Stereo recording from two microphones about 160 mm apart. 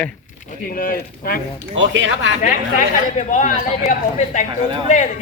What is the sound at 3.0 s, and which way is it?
A man's voice, 50° left (ahead or behind).